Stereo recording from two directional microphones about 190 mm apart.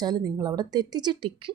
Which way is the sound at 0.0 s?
20° right (ahead or behind).